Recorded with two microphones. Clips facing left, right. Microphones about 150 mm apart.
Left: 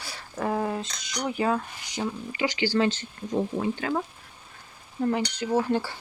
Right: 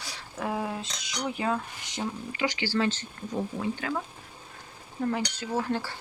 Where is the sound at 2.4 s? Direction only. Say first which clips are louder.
Left 3 dB; 15° left (ahead or behind).